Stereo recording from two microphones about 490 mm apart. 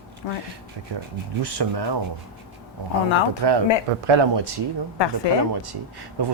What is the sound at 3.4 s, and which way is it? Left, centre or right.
Speech, right.